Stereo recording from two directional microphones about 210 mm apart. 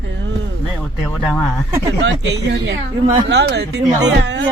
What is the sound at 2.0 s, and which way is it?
Speech, 55° right (ahead or behind).